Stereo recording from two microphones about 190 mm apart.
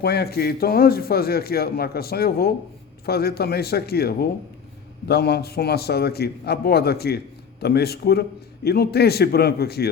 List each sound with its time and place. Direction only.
0.0 s a man's voice: 55° left (ahead or behind)